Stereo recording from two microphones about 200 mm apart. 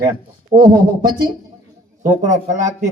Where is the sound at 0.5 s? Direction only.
30° right (ahead or behind).